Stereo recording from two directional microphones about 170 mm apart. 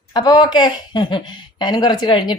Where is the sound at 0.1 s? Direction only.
25° left (ahead or behind).